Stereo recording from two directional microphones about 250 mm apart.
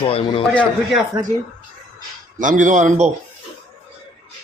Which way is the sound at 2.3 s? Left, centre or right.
Right.